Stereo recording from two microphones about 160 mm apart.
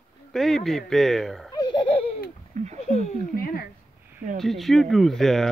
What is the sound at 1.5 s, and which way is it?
Laughter, 30° left (ahead or behind).